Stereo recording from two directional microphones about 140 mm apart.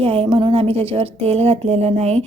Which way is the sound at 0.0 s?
45° right (ahead or behind).